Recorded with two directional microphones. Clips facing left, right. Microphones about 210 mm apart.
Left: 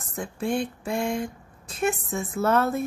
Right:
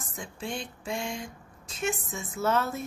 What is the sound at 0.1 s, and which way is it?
Speech, 60° left (ahead or behind).